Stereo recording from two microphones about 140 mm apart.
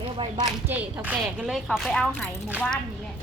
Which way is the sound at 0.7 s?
10° right (ahead or behind).